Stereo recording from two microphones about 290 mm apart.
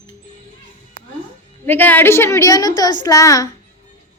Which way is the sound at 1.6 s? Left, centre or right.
Centre.